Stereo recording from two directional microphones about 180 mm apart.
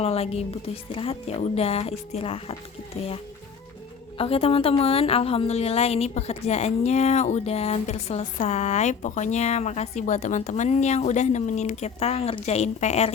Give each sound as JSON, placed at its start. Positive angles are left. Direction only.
{"t": 0.0, "sound": "a woman's voice", "side_deg": 35}
{"t": 4.2, "sound": "a woman's voice", "side_deg": 35}